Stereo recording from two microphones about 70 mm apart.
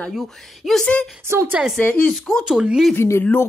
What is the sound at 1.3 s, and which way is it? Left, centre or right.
Speech, right.